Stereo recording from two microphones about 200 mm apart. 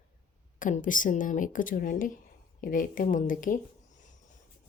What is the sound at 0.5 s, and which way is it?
Speech, 40° left (ahead or behind).